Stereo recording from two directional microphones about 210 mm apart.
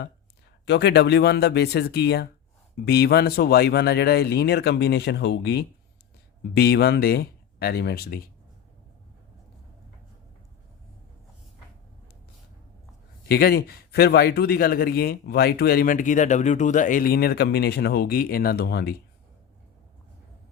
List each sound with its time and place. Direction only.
0.6 s speech: 55° left (ahead or behind)
13.2 s speech: 50° left (ahead or behind)